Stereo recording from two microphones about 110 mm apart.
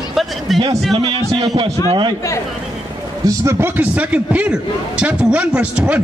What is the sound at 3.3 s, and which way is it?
A man's voice, 25° right (ahead or behind).